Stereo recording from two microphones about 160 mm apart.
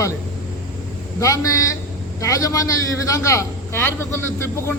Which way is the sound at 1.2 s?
20° left (ahead or behind).